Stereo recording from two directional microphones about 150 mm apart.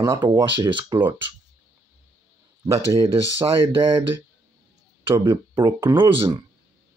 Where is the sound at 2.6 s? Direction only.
20° right (ahead or behind).